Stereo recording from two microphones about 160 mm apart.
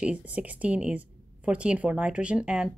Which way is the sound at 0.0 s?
5° right (ahead or behind).